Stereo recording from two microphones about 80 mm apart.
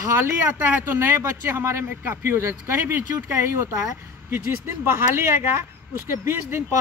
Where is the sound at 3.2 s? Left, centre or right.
Right.